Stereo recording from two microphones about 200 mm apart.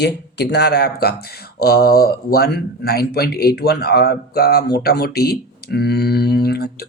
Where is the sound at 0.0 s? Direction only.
55° left (ahead or behind).